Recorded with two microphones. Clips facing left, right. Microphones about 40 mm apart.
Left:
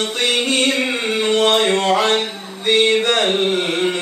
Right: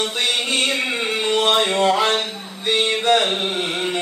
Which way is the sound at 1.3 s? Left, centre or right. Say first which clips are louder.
Left 3 dB; centre.